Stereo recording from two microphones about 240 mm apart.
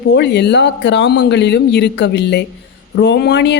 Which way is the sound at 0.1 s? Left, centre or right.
Left.